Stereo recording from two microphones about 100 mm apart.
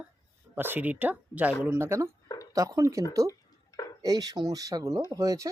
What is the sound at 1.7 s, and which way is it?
Speech, 25° right (ahead or behind).